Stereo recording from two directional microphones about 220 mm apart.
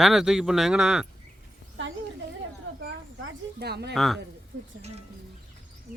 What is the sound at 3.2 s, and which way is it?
Speech, 50° right (ahead or behind).